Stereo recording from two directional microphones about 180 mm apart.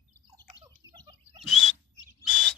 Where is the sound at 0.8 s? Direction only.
25° left (ahead or behind).